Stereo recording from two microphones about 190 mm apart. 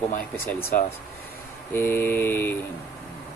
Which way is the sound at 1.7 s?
10° left (ahead or behind).